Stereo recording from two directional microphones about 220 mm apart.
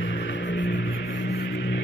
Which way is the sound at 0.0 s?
55° left (ahead or behind).